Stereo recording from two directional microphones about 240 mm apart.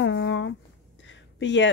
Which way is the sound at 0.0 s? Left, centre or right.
Left.